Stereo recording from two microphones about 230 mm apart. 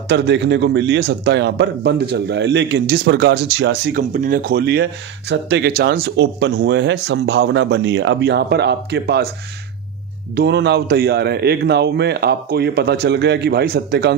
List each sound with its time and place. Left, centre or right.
0.1 s a man's voice: right
10.3 s a man's voice: right